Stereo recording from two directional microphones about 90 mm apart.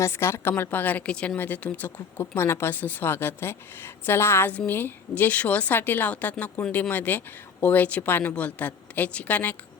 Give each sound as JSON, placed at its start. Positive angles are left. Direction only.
{"t": 0.0, "sound": "speech", "side_deg": 30}